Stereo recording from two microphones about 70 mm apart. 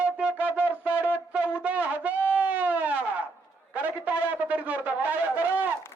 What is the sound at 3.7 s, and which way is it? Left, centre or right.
A man's voice, right.